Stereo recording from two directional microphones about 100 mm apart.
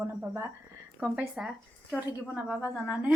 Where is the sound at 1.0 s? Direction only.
15° right (ahead or behind).